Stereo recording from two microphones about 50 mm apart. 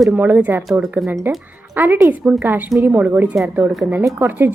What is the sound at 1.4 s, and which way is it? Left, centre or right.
Music, right.